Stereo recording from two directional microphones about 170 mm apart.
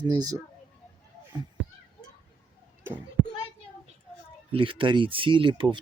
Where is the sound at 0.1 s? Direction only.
25° right (ahead or behind).